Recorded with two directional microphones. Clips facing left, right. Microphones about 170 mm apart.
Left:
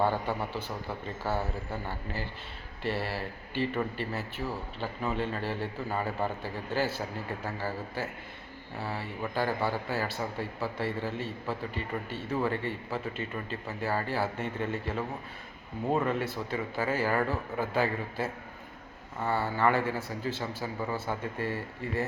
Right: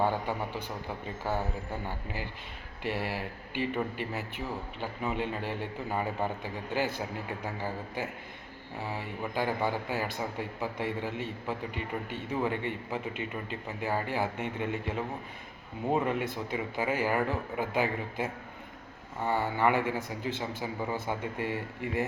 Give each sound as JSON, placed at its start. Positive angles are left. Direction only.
{"t": 0.0, "sound": "a man's voice", "side_deg": -15}